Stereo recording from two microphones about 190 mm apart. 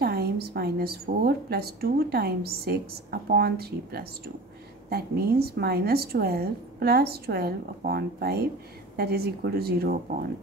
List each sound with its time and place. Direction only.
0.0 s a woman's voice: 55° right (ahead or behind)